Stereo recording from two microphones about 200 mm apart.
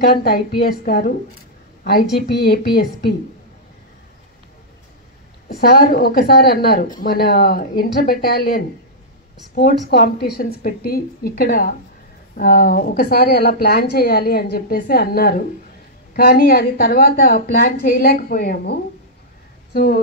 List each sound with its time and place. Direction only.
0.0 s a woman's voice: 50° left (ahead or behind)
5.6 s a woman's voice: 50° left (ahead or behind)